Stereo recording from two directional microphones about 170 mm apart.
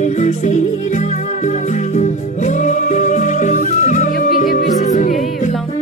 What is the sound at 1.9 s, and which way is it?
Music, 45° left (ahead or behind).